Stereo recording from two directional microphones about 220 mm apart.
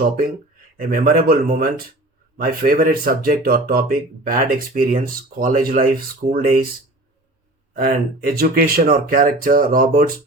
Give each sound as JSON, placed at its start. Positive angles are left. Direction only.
{"t": 0.8, "sound": "speech", "side_deg": -40}
{"t": 7.7, "sound": "speech", "side_deg": -40}